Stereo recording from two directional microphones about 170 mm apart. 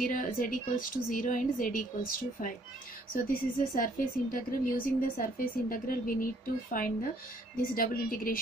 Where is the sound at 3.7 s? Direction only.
55° left (ahead or behind).